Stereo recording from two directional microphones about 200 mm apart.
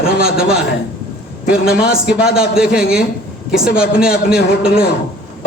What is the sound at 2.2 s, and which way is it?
A man's voice, 5° right (ahead or behind).